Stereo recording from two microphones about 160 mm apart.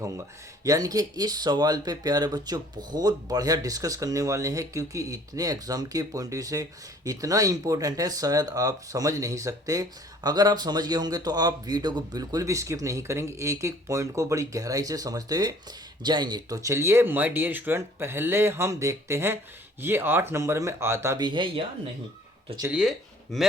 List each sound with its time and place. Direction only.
0.0 s speech: 20° right (ahead or behind)
21.2 s speech: 30° right (ahead or behind)
22.7 s speech: centre (ahead or behind)